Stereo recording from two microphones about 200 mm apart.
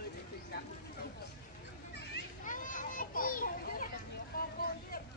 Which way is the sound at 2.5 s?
40° left (ahead or behind).